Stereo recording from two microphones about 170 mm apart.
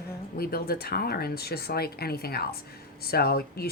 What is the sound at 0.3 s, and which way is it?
Speech, 65° left (ahead or behind).